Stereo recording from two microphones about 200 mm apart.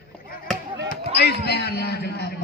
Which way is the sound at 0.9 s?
55° left (ahead or behind).